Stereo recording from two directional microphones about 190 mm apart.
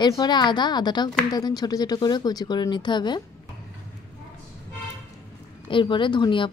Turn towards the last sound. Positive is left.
turn(degrees=25)  # may be behind; listen again after turning